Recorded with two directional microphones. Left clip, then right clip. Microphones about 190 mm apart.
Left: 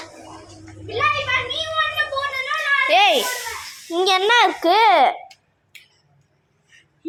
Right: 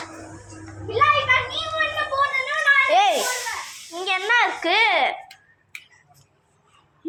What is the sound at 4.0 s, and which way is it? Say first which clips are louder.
Speech: left 5 dB; 65° left (ahead or behind).